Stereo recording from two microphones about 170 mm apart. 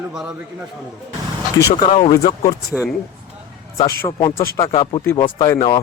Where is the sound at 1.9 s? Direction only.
40° left (ahead or behind).